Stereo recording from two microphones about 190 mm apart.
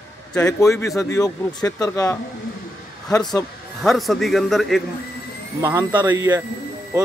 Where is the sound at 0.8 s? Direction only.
15° left (ahead or behind).